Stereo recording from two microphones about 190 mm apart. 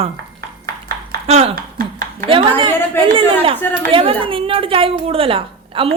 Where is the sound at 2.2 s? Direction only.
25° right (ahead or behind).